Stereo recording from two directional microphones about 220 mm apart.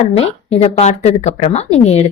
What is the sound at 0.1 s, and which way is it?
A woman's voice, 30° left (ahead or behind).